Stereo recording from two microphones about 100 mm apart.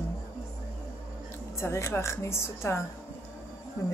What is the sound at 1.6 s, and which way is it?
A woman's voice, 25° left (ahead or behind).